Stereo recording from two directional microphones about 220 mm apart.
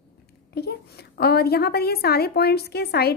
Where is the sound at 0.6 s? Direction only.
45° left (ahead or behind).